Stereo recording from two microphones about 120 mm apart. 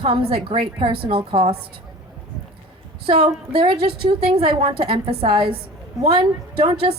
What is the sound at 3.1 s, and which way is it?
A woman's voice, 45° right (ahead or behind).